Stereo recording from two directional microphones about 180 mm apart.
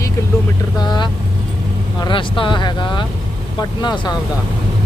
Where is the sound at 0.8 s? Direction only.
25° left (ahead or behind).